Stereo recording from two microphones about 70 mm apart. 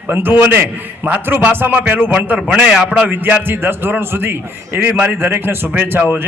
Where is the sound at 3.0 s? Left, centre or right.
Right.